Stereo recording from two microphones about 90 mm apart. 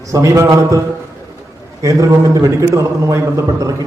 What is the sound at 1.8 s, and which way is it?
A man's voice, 40° right (ahead or behind).